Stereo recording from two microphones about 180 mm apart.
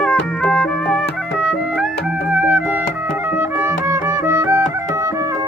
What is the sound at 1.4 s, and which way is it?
Music, 5° right (ahead or behind).